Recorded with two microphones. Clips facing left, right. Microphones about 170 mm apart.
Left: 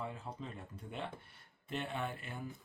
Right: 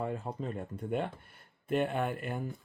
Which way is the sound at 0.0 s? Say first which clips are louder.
Right 8 dB; 50° right (ahead or behind).